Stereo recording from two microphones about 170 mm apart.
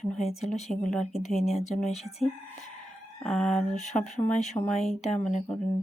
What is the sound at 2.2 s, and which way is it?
Speech, 5° left (ahead or behind).